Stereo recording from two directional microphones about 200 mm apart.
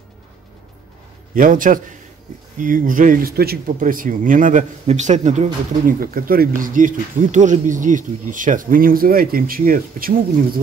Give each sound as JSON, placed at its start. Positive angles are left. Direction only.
{"t": 1.3, "sound": "a man's voice", "side_deg": -45}